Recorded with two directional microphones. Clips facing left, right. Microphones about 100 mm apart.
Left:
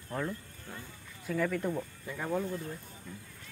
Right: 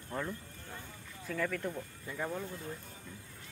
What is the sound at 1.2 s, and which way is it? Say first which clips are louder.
Speech: left 4 dB; 10° left (ahead or behind).